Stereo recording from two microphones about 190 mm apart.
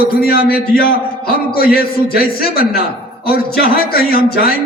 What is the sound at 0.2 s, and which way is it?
A man's voice, 55° left (ahead or behind).